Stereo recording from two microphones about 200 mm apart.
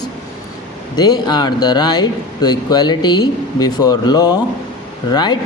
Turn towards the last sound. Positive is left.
turn(degrees=20)  # may be behind; listen again after turning